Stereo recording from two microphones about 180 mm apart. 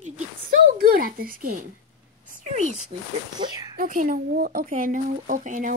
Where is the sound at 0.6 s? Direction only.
55° right (ahead or behind).